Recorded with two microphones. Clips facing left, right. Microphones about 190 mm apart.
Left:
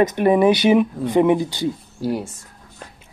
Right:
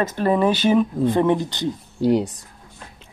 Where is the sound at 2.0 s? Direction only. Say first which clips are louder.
Right 6 dB; 20° right (ahead or behind).